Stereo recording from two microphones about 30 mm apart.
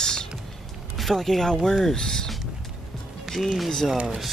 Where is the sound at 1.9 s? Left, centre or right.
Left.